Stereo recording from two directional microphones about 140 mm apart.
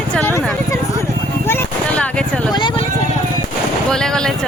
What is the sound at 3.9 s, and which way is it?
Speech, 5° left (ahead or behind).